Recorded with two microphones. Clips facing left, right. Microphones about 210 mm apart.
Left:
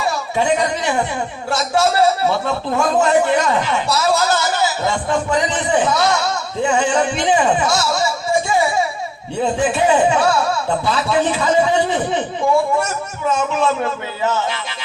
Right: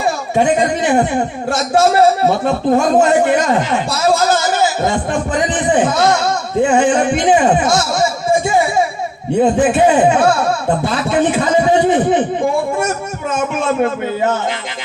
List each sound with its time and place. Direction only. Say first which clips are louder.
0.0 s speech: right 4 dB; 50° right (ahead or behind)